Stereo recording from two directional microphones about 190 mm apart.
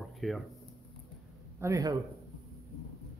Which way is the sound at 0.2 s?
Centre (ahead or behind).